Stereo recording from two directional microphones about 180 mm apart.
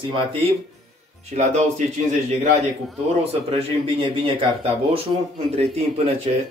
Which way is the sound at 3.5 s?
30° right (ahead or behind).